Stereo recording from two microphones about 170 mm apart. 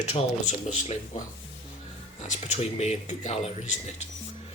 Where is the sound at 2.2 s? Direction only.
40° left (ahead or behind).